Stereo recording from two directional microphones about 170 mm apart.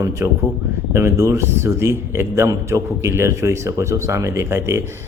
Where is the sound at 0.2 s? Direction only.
10° right (ahead or behind).